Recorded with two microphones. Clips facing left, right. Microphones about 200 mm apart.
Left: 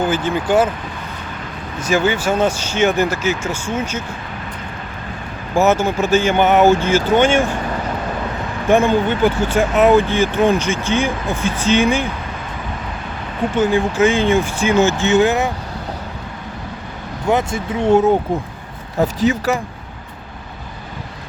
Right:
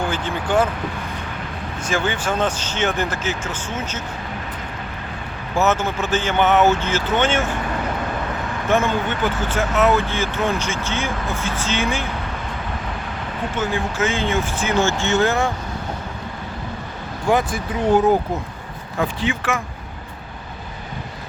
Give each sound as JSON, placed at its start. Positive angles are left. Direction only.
{"t": 0.0, "sound": "speech", "side_deg": 5}
{"t": 1.9, "sound": "speech", "side_deg": 10}
{"t": 5.5, "sound": "speech", "side_deg": 10}
{"t": 8.7, "sound": "speech", "side_deg": 15}
{"t": 13.6, "sound": "speech", "side_deg": 15}
{"t": 17.2, "sound": "speech", "side_deg": 25}
{"t": 18.9, "sound": "speech", "side_deg": 40}